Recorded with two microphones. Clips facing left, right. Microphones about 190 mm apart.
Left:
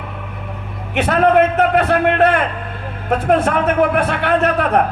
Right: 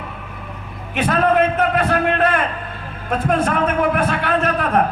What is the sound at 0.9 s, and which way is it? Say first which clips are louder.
A man's voice: left 3 dB; 65° left (ahead or behind).